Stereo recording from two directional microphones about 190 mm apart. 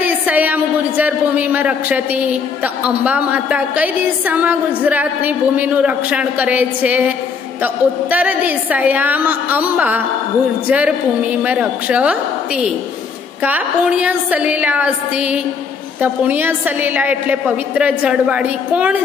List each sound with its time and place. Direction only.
0.0 s a woman's voice: 10° right (ahead or behind)
13.4 s a woman's voice: 10° right (ahead or behind)